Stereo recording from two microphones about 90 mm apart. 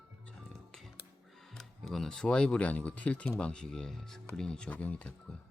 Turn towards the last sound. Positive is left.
turn(degrees=15)  # may be behind; listen again after turning